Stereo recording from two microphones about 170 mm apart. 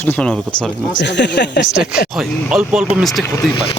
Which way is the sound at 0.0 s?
5° left (ahead or behind).